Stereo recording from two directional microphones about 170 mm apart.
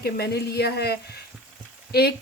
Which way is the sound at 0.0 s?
75° left (ahead or behind).